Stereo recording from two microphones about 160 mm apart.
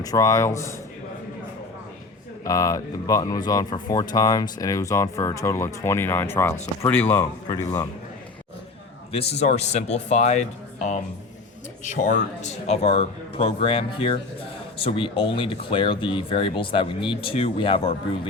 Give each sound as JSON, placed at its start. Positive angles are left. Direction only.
{"t": 0.0, "sound": "speech", "side_deg": 20}
{"t": 2.4, "sound": "speech", "side_deg": 20}
{"t": 9.1, "sound": "speech", "side_deg": 40}